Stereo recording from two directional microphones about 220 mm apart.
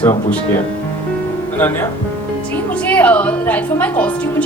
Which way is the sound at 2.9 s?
5° left (ahead or behind).